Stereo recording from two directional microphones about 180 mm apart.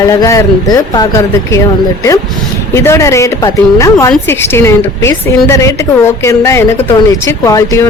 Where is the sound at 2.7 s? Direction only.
15° left (ahead or behind).